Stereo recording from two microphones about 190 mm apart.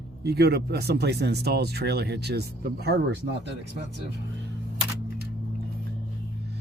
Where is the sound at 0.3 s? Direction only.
60° right (ahead or behind).